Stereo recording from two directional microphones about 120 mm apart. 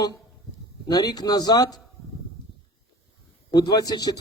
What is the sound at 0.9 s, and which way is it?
Speech, 30° left (ahead or behind).